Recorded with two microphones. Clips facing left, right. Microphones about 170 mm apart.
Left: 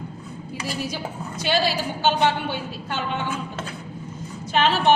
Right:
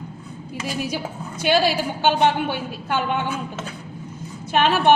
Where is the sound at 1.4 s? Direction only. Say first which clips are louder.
Right 4 dB; 55° right (ahead or behind).